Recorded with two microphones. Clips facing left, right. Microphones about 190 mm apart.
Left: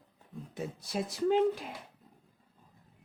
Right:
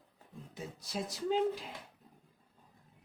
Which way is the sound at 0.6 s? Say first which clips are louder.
Left 5 dB; 60° left (ahead or behind).